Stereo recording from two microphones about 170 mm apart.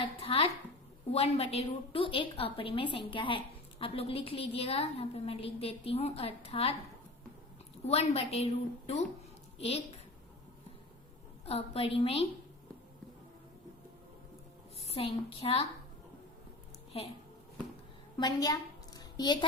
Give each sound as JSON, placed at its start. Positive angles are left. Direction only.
{"t": 0.0, "sound": "a sound", "side_deg": 35}
{"t": 1.1, "sound": "a woman's voice", "side_deg": 35}
{"t": 7.9, "sound": "a woman's voice", "side_deg": 35}
{"t": 9.6, "sound": "a woman's voice", "side_deg": 35}
{"t": 11.4, "sound": "a woman's voice", "side_deg": 35}
{"t": 14.8, "sound": "a woman's voice", "side_deg": 35}
{"t": 18.2, "sound": "a sound", "side_deg": 20}